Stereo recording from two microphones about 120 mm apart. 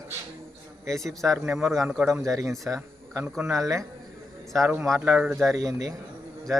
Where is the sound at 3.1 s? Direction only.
15° right (ahead or behind).